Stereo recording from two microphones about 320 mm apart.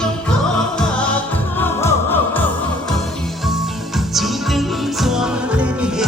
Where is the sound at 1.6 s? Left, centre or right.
Centre.